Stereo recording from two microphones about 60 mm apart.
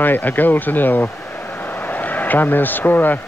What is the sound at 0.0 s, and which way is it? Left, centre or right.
A man's voice, left.